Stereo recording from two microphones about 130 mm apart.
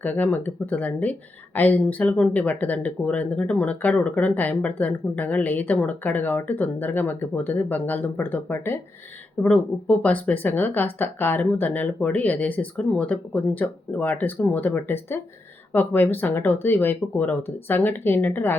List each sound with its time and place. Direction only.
0.0 s speech: 10° left (ahead or behind)